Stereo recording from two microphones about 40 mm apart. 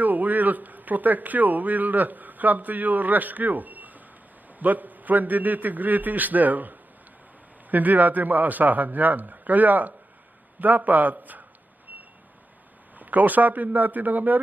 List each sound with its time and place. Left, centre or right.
0.0 s a man's voice: right
13.0 s a man's voice: right